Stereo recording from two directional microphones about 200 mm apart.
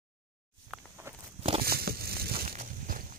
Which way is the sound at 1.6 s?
50° right (ahead or behind).